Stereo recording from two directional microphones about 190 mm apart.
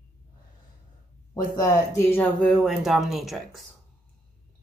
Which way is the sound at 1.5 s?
20° left (ahead or behind).